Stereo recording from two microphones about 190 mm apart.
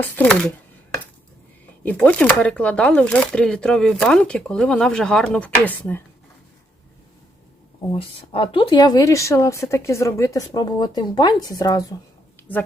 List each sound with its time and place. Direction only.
0.0 s speech: 5° left (ahead or behind)
1.8 s speech: 10° left (ahead or behind)
7.9 s speech: 30° left (ahead or behind)